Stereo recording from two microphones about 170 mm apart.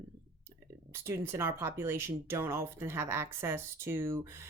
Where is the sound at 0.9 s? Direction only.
15° right (ahead or behind).